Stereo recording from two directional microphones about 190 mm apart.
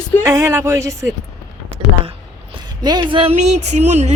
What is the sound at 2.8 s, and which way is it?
Speech, 20° right (ahead or behind).